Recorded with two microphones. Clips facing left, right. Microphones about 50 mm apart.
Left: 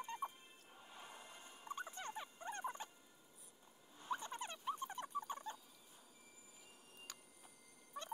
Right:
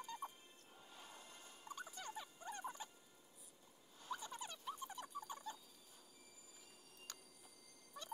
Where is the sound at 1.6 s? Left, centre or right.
Left.